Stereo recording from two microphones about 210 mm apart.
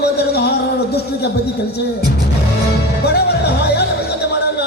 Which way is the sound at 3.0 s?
50° left (ahead or behind).